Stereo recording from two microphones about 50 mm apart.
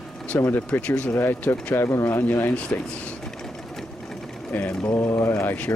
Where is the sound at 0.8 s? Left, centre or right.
Left.